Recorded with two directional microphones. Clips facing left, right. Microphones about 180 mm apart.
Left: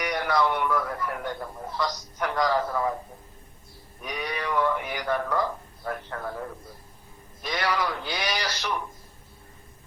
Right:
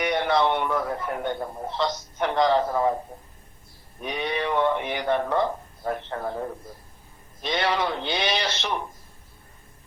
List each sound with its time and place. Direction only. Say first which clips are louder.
0.0 s a man's voice: right 3 dB; 25° right (ahead or behind)
4.0 s a man's voice: right 4 dB; 25° right (ahead or behind)